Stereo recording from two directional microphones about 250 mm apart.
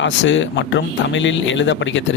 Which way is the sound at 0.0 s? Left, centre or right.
Left.